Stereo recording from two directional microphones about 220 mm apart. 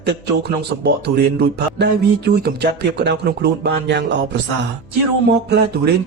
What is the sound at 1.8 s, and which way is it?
A man's voice, 50° right (ahead or behind).